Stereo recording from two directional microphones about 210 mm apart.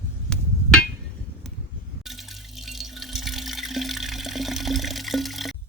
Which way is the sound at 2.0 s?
Centre (ahead or behind).